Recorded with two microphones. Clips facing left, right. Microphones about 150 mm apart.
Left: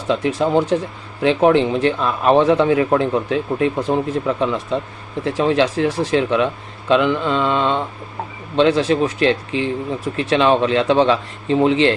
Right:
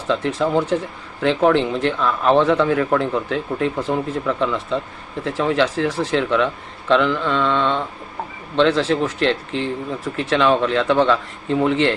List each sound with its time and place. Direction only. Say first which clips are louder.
0.1 s a man's voice: left 2 dB; 20° left (ahead or behind)